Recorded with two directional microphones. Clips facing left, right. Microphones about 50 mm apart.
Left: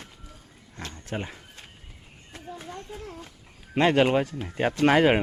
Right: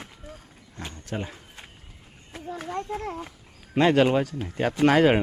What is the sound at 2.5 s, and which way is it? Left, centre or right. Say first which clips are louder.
Children playing: right 8 dB; right.